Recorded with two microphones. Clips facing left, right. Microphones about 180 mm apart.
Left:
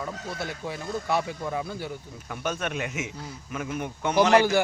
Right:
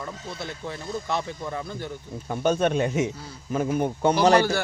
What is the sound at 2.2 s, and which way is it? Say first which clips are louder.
Speech: right 8 dB; 30° right (ahead or behind).